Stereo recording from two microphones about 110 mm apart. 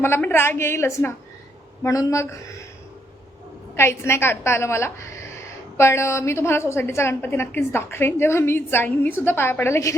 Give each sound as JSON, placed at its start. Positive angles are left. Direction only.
{"t": 0.0, "sound": "a woman's voice", "side_deg": 20}
{"t": 3.8, "sound": "a woman's voice", "side_deg": 25}